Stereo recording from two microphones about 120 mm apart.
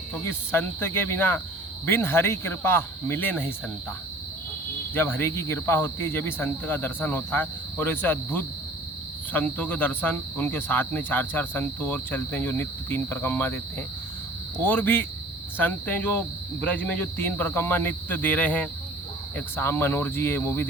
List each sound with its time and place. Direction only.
0.1 s speech: 15° left (ahead or behind)
4.9 s cricket: 20° left (ahead or behind)
19.5 s speech: 20° left (ahead or behind)